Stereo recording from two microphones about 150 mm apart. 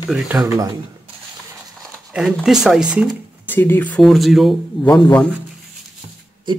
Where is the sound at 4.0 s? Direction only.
Centre (ahead or behind).